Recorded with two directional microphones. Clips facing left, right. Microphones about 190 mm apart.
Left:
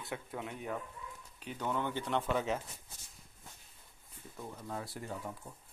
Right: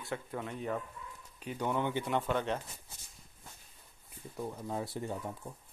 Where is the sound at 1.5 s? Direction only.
15° right (ahead or behind).